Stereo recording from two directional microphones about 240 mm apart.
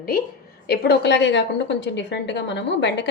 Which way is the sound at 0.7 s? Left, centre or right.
Left.